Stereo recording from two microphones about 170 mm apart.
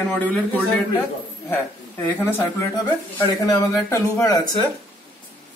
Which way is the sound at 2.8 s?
25° left (ahead or behind).